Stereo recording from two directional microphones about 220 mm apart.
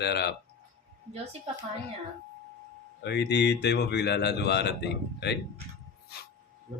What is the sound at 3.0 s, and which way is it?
A man's voice, 50° left (ahead or behind).